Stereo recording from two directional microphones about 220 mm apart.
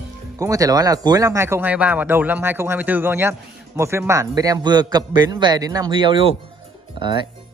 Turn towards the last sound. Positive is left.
turn(degrees=-20)  # may be behind; listen again after turning